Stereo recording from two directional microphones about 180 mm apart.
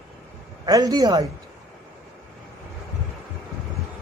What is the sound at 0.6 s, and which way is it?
Speech, 20° right (ahead or behind).